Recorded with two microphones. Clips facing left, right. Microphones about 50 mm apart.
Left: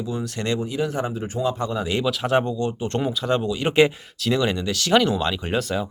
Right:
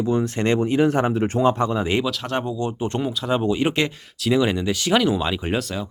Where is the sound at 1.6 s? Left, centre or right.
Right.